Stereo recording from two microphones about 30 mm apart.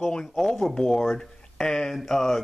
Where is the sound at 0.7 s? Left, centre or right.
Left.